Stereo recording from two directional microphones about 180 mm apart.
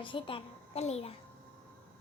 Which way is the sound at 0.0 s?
30° left (ahead or behind).